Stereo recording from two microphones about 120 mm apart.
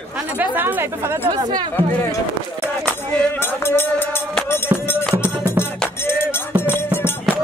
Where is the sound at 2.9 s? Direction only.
15° left (ahead or behind).